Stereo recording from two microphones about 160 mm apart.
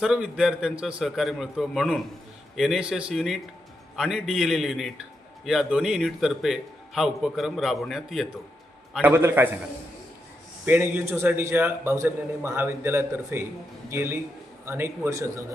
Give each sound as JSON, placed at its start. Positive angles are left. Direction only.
{"t": 0.0, "sound": "a man's voice", "side_deg": -5}
{"t": 9.0, "sound": "a man's voice", "side_deg": -10}
{"t": 10.7, "sound": "a man's voice", "side_deg": -15}